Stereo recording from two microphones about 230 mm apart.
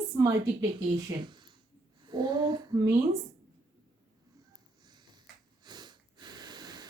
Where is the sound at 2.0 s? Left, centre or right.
Centre.